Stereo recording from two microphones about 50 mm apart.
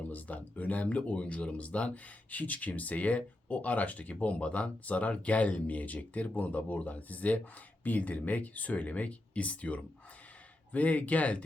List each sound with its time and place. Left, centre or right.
0.1 s speech: left